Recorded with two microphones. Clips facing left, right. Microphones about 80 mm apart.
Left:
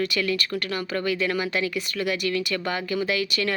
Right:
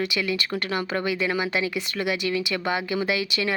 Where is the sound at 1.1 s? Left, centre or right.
Centre.